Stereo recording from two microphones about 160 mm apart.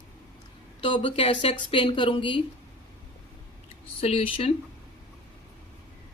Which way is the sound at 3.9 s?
35° left (ahead or behind).